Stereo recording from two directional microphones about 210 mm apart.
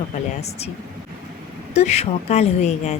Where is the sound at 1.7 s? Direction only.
30° left (ahead or behind).